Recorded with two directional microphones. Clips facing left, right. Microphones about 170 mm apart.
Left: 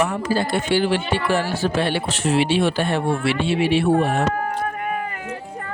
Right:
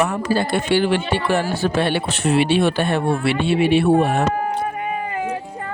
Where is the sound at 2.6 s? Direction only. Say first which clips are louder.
Right 2 dB; 60° right (ahead or behind).